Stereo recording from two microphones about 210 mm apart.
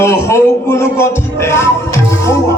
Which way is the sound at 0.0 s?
10° left (ahead or behind).